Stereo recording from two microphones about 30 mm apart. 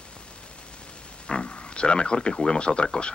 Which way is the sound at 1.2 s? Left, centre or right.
Left.